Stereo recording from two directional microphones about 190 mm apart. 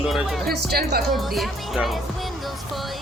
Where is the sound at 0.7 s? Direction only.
55° right (ahead or behind).